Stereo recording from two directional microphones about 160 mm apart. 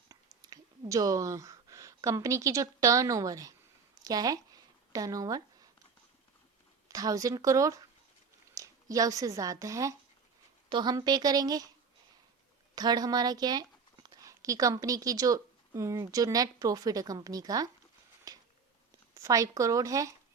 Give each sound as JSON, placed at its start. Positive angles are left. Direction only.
{"t": 0.1, "sound": "speech", "side_deg": -20}
{"t": 4.0, "sound": "a sound", "side_deg": -25}
{"t": 6.8, "sound": "a woman's voice", "side_deg": -20}
{"t": 12.7, "sound": "speech", "side_deg": -25}
{"t": 18.3, "sound": "a sound", "side_deg": -20}
{"t": 19.1, "sound": "a woman's voice", "side_deg": -20}